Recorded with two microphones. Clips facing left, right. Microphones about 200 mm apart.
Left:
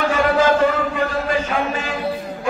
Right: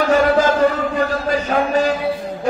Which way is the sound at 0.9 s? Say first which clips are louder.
Right 2 dB; 40° right (ahead or behind).